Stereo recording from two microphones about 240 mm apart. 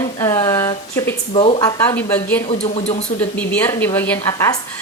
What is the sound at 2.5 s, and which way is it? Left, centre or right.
Speech, left.